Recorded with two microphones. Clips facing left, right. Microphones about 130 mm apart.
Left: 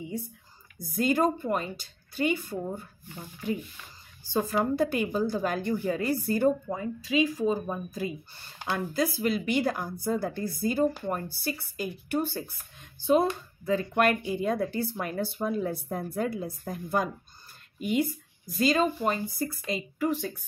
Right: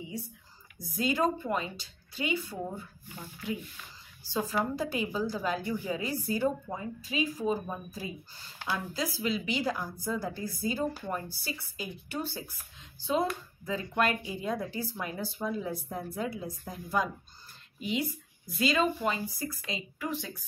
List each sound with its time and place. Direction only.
0.7 s speech: 55° left (ahead or behind)
4.3 s a woman's voice: 60° left (ahead or behind); by 7.5 s 75° left (ahead or behind)
8.6 s a woman's voice: 60° left (ahead or behind)